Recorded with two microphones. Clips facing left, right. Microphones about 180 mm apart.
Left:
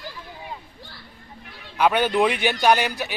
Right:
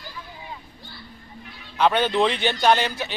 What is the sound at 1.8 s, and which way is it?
Speech, 10° left (ahead or behind).